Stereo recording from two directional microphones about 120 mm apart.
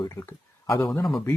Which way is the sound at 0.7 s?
25° left (ahead or behind).